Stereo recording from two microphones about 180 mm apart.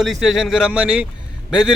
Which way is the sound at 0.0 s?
Centre (ahead or behind).